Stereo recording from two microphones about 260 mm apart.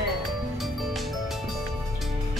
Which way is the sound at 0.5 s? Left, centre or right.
Centre.